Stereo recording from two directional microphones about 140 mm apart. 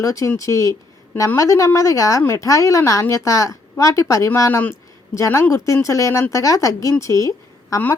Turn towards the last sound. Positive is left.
turn(degrees=20)  # may be behind; listen again after turning